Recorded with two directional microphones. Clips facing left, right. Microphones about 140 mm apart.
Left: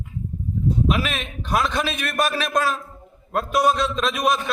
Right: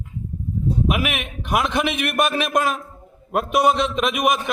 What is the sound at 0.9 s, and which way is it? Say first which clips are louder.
A man's voice: even; 20° right (ahead or behind).